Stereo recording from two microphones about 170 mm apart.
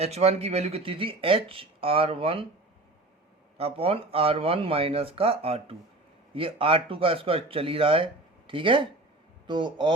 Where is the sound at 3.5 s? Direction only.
35° right (ahead or behind).